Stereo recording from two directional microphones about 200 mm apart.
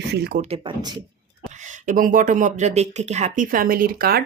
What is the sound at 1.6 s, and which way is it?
Speech, 40° right (ahead or behind).